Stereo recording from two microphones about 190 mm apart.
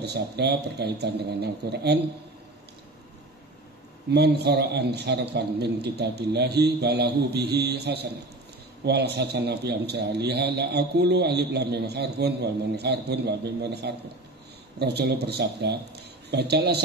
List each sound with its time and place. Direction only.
0.0 s a man's voice: 60° right (ahead or behind)
4.1 s a man's voice: 60° right (ahead or behind)